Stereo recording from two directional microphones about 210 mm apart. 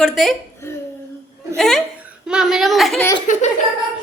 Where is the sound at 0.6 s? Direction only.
10° left (ahead or behind).